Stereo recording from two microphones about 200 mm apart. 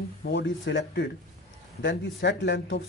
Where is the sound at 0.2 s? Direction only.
60° left (ahead or behind).